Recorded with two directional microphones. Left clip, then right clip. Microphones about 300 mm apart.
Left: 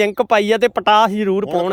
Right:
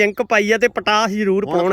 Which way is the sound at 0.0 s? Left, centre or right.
Centre.